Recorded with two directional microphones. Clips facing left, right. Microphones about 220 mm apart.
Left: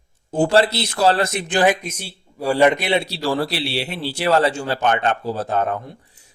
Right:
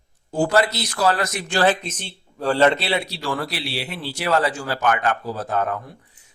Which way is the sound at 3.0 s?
35° left (ahead or behind).